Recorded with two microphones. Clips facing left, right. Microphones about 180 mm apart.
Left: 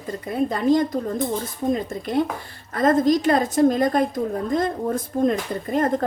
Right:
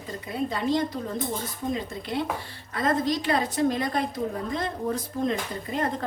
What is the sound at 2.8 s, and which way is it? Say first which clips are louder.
A woman's voice: left 7 dB; 50° left (ahead or behind).